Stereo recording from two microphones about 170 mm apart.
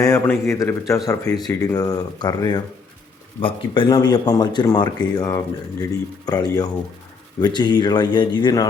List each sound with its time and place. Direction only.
0.0 s speech: 15° left (ahead or behind)